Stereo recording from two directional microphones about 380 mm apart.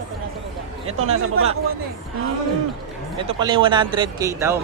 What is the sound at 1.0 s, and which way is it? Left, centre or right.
Speech, right.